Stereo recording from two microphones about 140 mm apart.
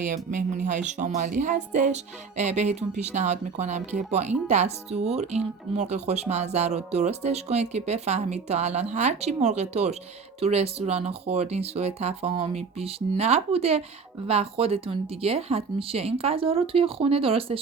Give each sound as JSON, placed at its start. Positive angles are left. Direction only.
{"t": 0.0, "sound": "a woman's voice", "side_deg": -65}